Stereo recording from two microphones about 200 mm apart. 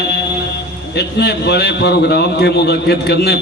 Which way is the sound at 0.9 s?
55° left (ahead or behind).